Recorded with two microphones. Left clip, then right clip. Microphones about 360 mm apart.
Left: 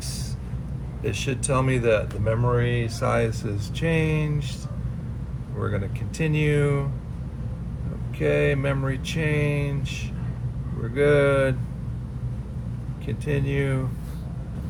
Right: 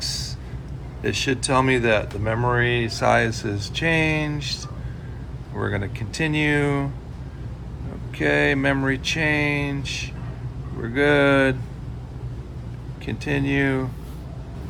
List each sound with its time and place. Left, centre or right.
1.0 s speech: right
5.6 s speech: right
8.2 s speech: right
13.1 s speech: right